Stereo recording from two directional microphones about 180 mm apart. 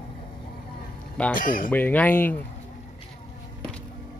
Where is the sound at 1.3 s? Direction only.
50° left (ahead or behind).